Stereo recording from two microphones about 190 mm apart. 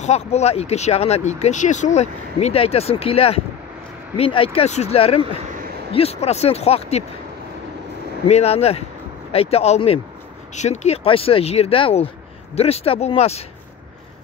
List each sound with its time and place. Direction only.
0.0 s speech: 35° left (ahead or behind)
8.3 s speech: 35° left (ahead or behind)